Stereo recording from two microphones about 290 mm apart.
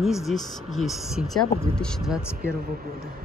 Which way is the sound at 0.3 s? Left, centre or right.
Centre.